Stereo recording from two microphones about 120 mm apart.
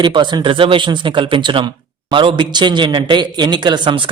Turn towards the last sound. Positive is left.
turn(degrees=-45)  # may be behind; listen again after turning